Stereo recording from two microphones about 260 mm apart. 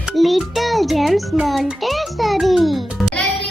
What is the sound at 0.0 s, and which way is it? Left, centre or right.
Music, centre.